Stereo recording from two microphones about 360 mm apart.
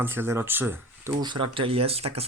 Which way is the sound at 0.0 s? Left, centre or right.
Centre.